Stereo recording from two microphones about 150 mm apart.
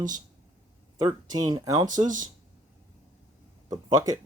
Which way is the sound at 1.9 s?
60° right (ahead or behind).